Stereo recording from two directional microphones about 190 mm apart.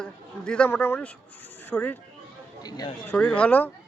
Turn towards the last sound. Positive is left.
turn(degrees=10)  # may be behind; listen again after turning